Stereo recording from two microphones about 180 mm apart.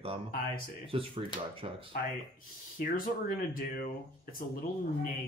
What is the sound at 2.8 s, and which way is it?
Speech, 50° left (ahead or behind).